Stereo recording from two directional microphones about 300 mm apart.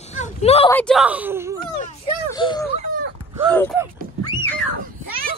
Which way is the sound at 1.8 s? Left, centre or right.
Centre.